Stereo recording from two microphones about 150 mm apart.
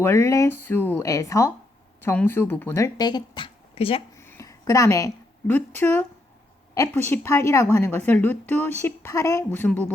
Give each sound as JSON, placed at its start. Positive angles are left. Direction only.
{"t": 0.0, "sound": "a woman's voice", "side_deg": 20}
{"t": 4.2, "sound": "a sound", "side_deg": 20}
{"t": 6.7, "sound": "a woman's voice", "side_deg": 15}